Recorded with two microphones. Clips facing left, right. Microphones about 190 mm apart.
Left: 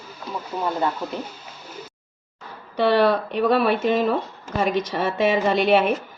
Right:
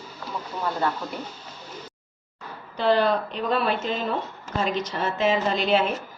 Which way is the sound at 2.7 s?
70° left (ahead or behind).